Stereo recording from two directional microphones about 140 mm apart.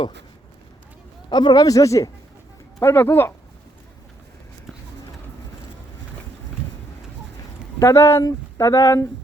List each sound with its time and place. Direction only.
1.3 s speech: 30° left (ahead or behind)
7.8 s speech: 20° left (ahead or behind)